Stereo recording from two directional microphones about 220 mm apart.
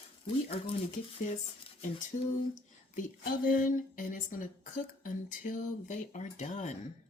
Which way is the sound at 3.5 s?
35° left (ahead or behind).